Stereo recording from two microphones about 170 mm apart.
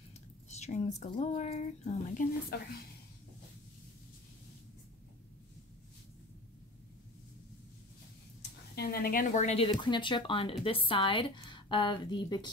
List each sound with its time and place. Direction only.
0.5 s speech: 45° left (ahead or behind)
2.5 s speech: 65° left (ahead or behind)
8.4 s a woman's voice: 65° left (ahead or behind); by 12.4 s 25° left (ahead or behind)